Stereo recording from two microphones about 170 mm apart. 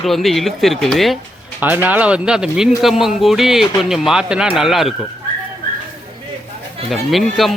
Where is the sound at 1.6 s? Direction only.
10° right (ahead or behind).